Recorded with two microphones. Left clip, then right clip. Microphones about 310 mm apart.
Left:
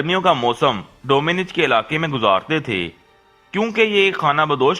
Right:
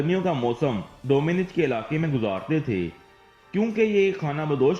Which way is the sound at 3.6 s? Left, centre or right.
Left.